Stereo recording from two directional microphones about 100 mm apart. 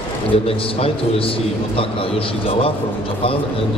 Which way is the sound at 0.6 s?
65° left (ahead or behind).